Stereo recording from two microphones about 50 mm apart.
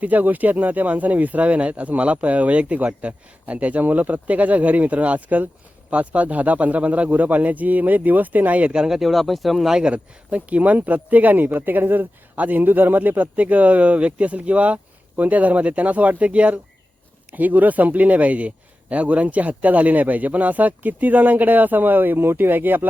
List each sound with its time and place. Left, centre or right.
0.0 s speech: right
8.7 s speech: centre
9.0 s speech: centre
9.8 s speech: right